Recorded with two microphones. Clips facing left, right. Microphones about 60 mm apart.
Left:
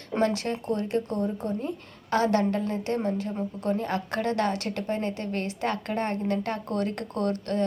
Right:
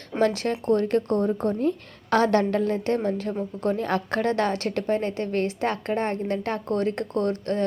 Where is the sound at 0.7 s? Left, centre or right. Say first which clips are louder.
Right 7 dB; right.